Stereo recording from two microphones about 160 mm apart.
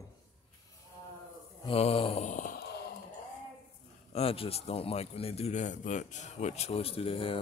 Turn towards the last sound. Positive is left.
turn(degrees=35)  # may be behind; listen again after turning